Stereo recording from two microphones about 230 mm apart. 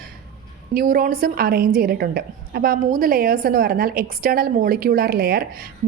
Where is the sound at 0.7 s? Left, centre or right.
Right.